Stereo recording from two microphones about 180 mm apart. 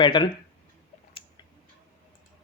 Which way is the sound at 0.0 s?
25° left (ahead or behind).